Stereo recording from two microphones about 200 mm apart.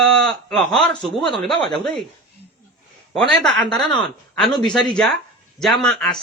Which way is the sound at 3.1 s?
Centre (ahead or behind).